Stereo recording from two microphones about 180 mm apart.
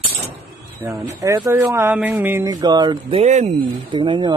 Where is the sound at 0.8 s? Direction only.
15° right (ahead or behind); by 3.7 s 40° right (ahead or behind).